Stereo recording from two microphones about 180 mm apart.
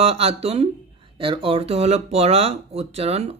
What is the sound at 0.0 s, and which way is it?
Speech, 35° right (ahead or behind).